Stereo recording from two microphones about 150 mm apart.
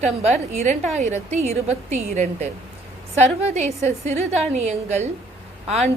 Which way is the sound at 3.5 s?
45° right (ahead or behind).